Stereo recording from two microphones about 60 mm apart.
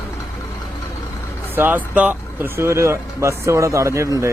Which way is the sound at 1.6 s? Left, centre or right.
Right.